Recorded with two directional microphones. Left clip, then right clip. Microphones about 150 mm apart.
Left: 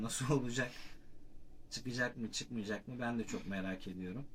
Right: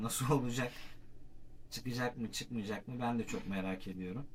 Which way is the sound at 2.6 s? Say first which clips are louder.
Right 3 dB; 5° right (ahead or behind).